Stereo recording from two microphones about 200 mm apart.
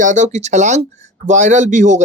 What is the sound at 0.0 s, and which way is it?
Speech, 40° right (ahead or behind).